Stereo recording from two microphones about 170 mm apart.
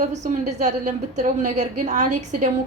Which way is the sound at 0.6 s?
45° right (ahead or behind).